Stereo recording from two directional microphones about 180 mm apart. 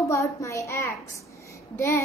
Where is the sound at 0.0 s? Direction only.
15° left (ahead or behind).